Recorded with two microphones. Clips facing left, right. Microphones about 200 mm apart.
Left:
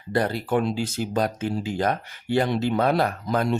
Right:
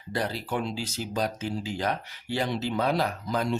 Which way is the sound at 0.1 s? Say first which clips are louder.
Left 7 dB; 55° left (ahead or behind).